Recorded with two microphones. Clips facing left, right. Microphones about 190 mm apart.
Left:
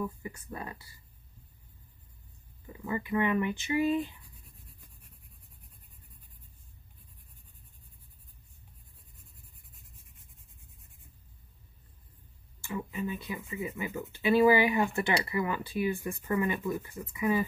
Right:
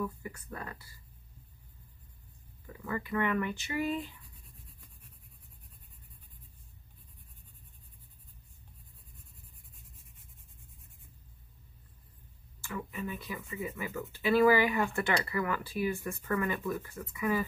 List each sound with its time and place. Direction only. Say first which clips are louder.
0.0 s speech: left 1 dB; 20° left (ahead or behind)
2.6 s speech: left 2 dB; 15° left (ahead or behind)
12.7 s speech: left 3 dB; 20° left (ahead or behind)